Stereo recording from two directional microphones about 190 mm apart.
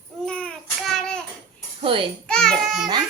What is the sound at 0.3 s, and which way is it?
Child singing, 5° left (ahead or behind).